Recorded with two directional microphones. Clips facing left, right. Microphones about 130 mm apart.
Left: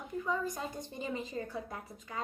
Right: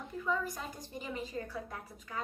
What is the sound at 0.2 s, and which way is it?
A woman's voice, 20° left (ahead or behind).